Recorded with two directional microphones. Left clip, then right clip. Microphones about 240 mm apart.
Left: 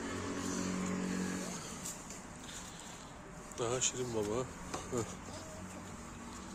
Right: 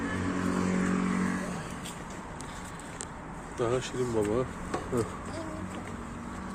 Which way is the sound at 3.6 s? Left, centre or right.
Centre.